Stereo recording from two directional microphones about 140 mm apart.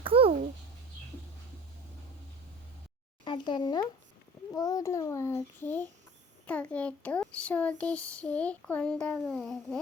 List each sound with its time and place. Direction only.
0.0 s dog: 40° right (ahead or behind)
3.2 s a child's voice: 35° left (ahead or behind); by 9.2 s 10° left (ahead or behind)
9.2 s babbling: centre (ahead or behind)